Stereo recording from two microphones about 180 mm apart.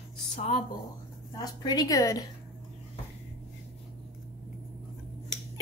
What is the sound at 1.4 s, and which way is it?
Speech, 20° left (ahead or behind).